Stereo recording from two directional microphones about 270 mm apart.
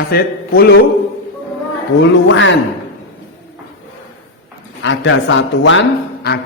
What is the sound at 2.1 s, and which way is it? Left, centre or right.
Mantra, left.